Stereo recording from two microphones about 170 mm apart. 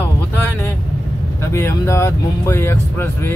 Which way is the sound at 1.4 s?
15° left (ahead or behind).